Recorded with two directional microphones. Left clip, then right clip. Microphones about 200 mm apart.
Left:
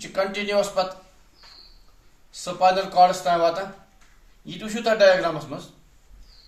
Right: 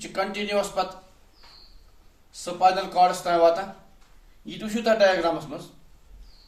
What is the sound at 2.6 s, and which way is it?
Speech, 30° left (ahead or behind).